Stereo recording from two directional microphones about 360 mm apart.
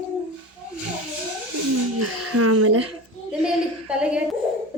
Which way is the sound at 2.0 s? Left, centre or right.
Right.